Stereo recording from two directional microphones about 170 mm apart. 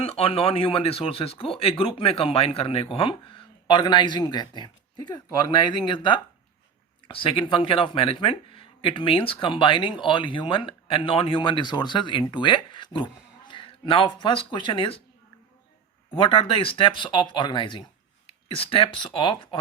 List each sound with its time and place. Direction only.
0.0 s speech: 35° left (ahead or behind)
16.1 s speech: 30° left (ahead or behind)